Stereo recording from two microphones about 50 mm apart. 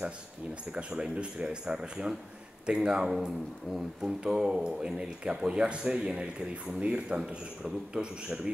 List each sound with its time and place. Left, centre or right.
0.7 s a man's voice: right